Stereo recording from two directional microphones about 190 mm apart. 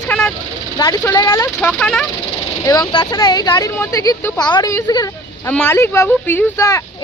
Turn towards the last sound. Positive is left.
turn(degrees=15)  # may be behind; listen again after turning